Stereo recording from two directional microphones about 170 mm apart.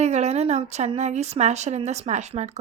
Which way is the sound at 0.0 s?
40° right (ahead or behind).